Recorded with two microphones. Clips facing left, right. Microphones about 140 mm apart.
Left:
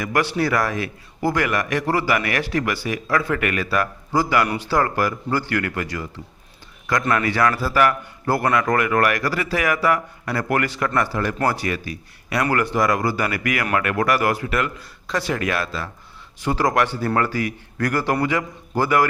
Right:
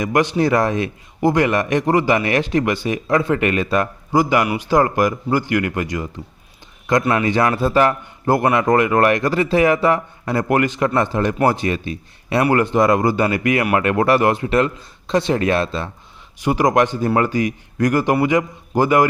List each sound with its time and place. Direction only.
0.0 s a man's voice: 20° right (ahead or behind)